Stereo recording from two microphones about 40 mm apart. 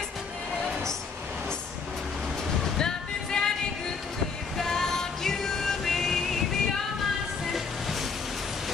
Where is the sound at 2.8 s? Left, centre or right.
Centre.